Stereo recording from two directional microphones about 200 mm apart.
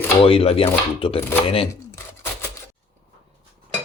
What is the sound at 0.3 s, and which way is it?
Speech, 30° left (ahead or behind).